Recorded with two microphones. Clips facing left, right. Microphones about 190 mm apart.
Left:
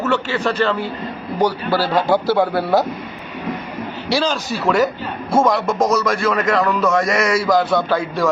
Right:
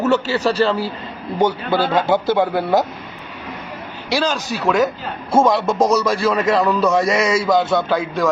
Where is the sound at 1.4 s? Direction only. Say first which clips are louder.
Even; 25° right (ahead or behind).